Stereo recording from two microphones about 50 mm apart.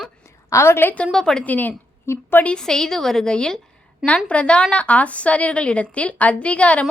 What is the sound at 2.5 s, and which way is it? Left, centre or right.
A woman's voice, centre.